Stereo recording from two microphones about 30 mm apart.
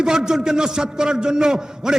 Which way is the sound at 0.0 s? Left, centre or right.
Right.